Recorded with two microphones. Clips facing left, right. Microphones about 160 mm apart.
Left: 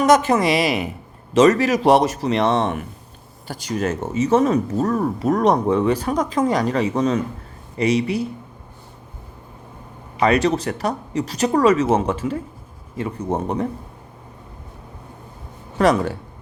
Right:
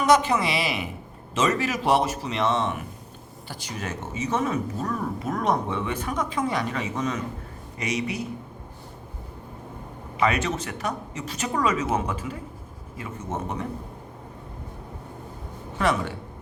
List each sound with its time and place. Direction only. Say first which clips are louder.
0.0 s speech: left 5 dB; 45° left (ahead or behind)
1.3 s speech: left 10 dB; 70° left (ahead or behind)
1.7 s speech: left 8 dB; 40° left (ahead or behind)
2.3 s speech: left 5 dB; 65° left (ahead or behind)
3.4 s speech: left 11 dB; 40° left (ahead or behind)
5.2 s speech: left 11 dB; 75° left (ahead or behind)
5.6 s speech: left 10 dB; 40° left (ahead or behind)
10.2 s speech: left 7 dB; 35° left (ahead or behind)
15.8 s speech: left 8 dB; 40° left (ahead or behind)